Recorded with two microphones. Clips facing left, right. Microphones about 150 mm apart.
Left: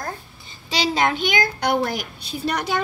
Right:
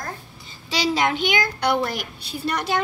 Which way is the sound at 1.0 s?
40° left (ahead or behind).